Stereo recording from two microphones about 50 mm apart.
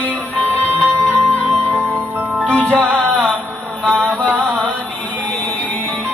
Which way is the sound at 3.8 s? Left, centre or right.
Centre.